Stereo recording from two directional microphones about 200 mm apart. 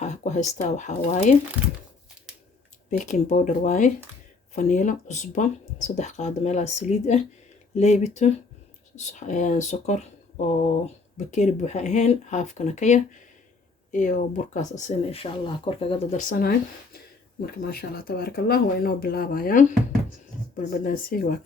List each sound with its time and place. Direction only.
0.0 s speech: 35° left (ahead or behind)
2.9 s speech: 35° left (ahead or behind)
16.4 s speech: 45° left (ahead or behind)